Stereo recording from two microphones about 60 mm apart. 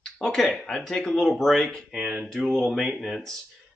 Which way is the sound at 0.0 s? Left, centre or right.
Centre.